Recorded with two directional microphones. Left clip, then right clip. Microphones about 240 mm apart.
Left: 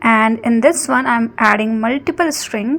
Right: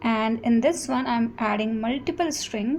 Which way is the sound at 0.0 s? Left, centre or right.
Centre.